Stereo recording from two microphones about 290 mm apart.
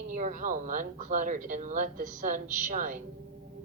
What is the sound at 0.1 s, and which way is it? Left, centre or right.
A woman's voice, right.